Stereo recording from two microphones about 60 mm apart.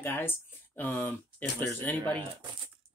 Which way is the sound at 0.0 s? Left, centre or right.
Left.